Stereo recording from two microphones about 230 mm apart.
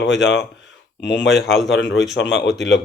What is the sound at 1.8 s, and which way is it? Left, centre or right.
Speech, left.